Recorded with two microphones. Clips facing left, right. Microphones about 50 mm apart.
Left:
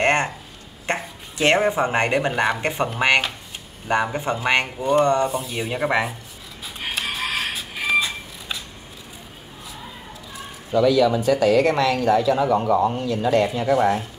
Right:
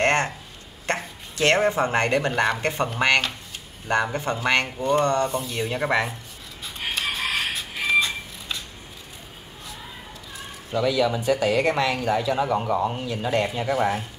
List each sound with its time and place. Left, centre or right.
0.0 s a sound: centre
0.8 s speech: centre
5.3 s speech: centre
6.6 s music: centre
11.1 s a woman's voice: centre